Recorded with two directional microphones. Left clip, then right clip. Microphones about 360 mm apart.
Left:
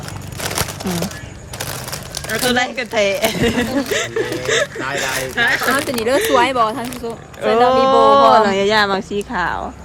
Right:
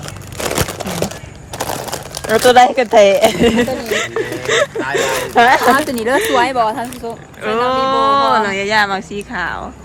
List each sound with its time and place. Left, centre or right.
0.4 s crumpling: centre
1.5 s speech: centre